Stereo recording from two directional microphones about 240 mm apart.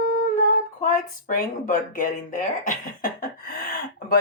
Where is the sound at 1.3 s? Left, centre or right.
Left.